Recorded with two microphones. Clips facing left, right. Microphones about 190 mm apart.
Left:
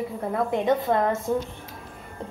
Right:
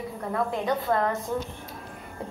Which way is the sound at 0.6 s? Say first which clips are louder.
Left 4 dB; 20° left (ahead or behind).